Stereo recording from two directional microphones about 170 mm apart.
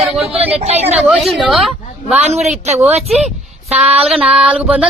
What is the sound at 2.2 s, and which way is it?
Speech, 40° right (ahead or behind).